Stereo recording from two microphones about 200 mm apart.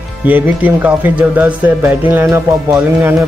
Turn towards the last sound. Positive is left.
turn(degrees=-10)  # may be behind; listen again after turning